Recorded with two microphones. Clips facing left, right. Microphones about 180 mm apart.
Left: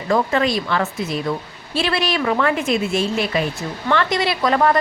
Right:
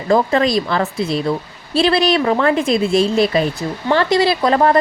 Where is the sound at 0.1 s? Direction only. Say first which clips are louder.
Right 4 dB; 35° right (ahead or behind).